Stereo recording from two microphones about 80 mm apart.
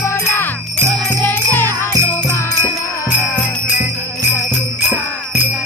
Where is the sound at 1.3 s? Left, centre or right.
Left.